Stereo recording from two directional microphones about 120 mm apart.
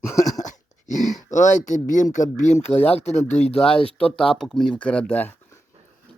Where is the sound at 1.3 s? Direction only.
90° left.